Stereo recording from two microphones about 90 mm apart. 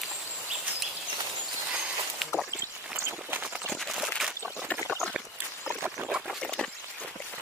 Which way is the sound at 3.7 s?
Centre (ahead or behind).